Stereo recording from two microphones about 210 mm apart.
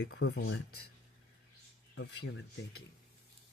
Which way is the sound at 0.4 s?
80° left.